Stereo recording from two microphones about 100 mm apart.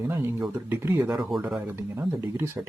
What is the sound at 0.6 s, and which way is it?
Speech, 20° right (ahead or behind).